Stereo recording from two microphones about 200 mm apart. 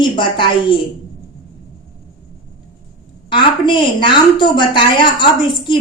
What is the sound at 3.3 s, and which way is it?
A woman's voice, 25° left (ahead or behind).